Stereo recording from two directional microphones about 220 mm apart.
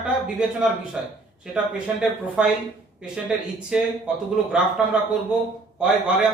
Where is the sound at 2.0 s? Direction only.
5° right (ahead or behind).